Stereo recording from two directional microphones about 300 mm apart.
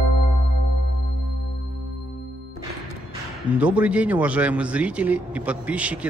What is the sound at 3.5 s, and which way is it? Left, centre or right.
A man's voice, centre.